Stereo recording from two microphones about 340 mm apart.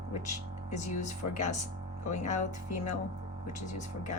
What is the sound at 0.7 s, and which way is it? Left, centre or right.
Speech, left.